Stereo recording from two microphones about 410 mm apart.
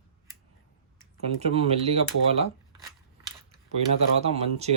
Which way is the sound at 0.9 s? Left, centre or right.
Centre.